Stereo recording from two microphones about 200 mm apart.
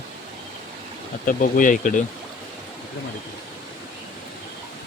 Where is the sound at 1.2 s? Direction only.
45° left (ahead or behind).